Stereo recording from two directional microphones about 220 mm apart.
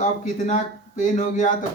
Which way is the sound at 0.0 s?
35° left (ahead or behind).